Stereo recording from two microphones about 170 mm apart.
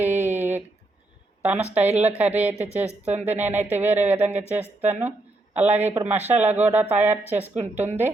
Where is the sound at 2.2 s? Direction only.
10° right (ahead or behind).